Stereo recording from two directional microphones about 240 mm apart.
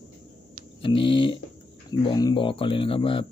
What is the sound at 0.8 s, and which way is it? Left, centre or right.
Speech, left.